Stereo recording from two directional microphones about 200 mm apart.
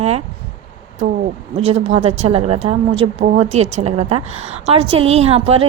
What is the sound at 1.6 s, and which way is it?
A woman's voice, 30° right (ahead or behind).